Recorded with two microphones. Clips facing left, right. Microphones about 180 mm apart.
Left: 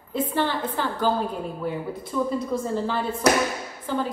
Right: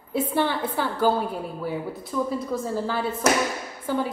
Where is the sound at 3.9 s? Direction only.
10° right (ahead or behind).